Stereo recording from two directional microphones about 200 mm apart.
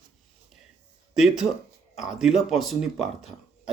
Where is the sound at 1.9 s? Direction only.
Centre (ahead or behind).